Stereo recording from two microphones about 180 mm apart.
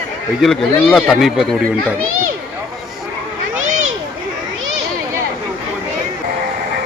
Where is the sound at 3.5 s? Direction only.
90° right.